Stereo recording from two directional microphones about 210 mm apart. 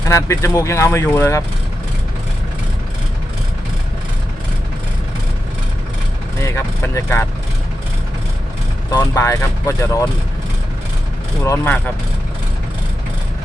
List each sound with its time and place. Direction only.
0.1 s speech: 15° left (ahead or behind)
6.4 s speech: 15° left (ahead or behind)
8.9 s speech: 15° left (ahead or behind)
11.4 s speech: 10° left (ahead or behind)